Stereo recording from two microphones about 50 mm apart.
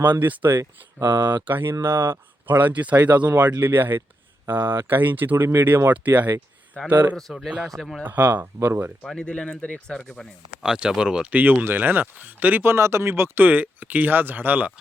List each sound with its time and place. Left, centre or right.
0.0 s speech: right
2.6 s speech: right
3.6 s speech: right
6.8 s speech: left
7.2 s speech: centre
8.0 s speech: right
8.6 s speech: right
9.1 s speech: centre
10.6 s speech: centre
11.3 s speech: right
12.7 s speech: right
13.4 s speech: right